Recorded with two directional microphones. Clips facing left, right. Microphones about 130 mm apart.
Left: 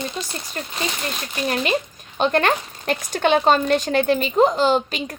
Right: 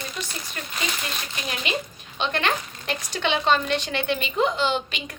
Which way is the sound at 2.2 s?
45° left (ahead or behind).